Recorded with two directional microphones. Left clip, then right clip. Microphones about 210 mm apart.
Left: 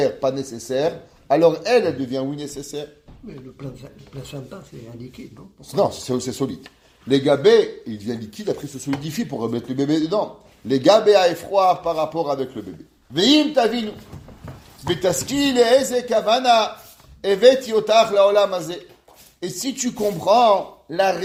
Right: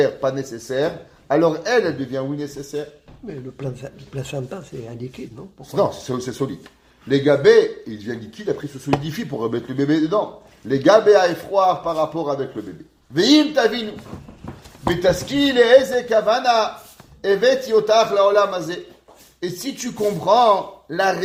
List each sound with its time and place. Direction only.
0.0 s a man's voice: 40° left (ahead or behind)
5.7 s a man's voice: 40° left (ahead or behind)
15.0 s a man's voice: 45° left (ahead or behind)